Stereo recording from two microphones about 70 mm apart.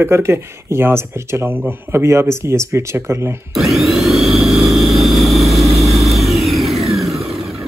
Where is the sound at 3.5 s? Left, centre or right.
Centre.